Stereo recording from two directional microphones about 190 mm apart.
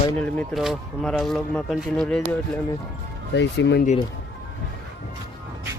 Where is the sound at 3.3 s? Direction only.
65° left (ahead or behind).